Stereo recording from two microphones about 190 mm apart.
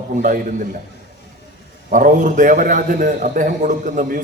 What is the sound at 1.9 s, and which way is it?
A man's voice, 45° right (ahead or behind).